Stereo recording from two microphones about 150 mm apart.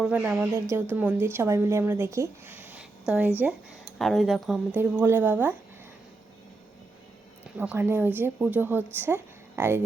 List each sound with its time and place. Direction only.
0.0 s a woman's voice: 10° right (ahead or behind)
3.9 s speech: centre (ahead or behind)
4.8 s a woman's voice: 15° right (ahead or behind)
7.6 s a woman's voice: 10° right (ahead or behind)